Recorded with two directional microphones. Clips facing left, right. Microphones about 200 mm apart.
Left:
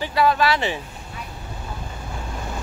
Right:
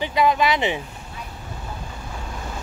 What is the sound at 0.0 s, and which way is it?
Speech, 20° right (ahead or behind).